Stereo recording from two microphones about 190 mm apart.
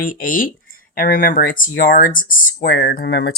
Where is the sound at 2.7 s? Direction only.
55° left (ahead or behind).